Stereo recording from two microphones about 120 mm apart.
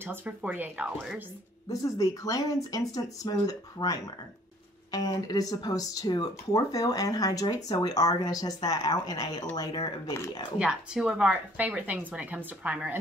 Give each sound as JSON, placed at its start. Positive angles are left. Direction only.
{"t": 0.0, "sound": "a woman's voice", "side_deg": -15}
{"t": 1.7, "sound": "speech", "side_deg": 30}
{"t": 10.6, "sound": "a woman's voice", "side_deg": -5}